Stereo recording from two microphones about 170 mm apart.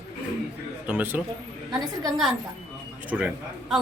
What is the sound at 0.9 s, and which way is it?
Speech, 10° right (ahead or behind).